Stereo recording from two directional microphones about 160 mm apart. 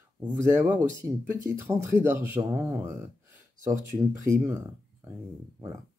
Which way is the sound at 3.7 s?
15° right (ahead or behind).